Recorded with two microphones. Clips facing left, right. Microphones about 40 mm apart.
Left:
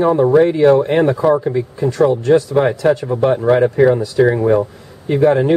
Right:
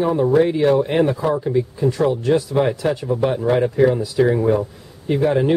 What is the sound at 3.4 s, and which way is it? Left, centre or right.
Speech, left.